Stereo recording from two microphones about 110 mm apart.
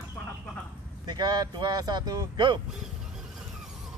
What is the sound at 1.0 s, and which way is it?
Speech, 40° right (ahead or behind).